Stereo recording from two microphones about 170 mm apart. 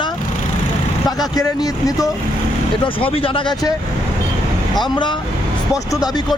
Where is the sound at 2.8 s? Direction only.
30° left (ahead or behind).